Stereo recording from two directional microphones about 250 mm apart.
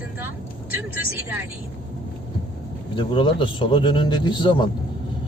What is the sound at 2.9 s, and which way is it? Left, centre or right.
A man's voice, centre.